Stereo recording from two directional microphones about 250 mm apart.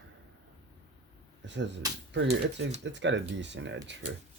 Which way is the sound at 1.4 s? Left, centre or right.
Right.